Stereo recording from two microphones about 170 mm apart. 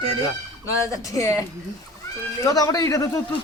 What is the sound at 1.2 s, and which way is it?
A man's voice, 20° left (ahead or behind).